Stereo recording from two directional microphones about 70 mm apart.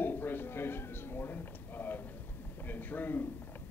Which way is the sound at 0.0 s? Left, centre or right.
Left.